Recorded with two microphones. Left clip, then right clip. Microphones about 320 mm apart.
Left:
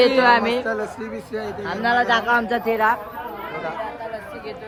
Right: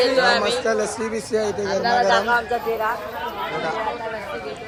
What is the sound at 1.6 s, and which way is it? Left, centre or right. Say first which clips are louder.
Speech: left 1 dB; left.